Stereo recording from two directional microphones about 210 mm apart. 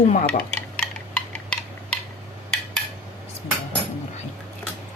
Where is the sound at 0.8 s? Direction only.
5° left (ahead or behind).